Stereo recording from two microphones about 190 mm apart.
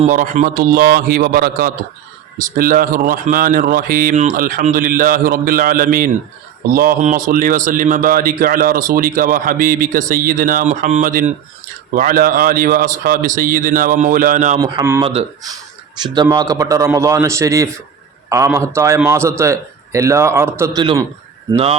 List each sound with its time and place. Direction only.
0.0 s speech: 40° right (ahead or behind)
14.6 s a man's voice: 15° right (ahead or behind)
15.0 s a man's voice: 25° right (ahead or behind)
21.5 s speech: 30° right (ahead or behind)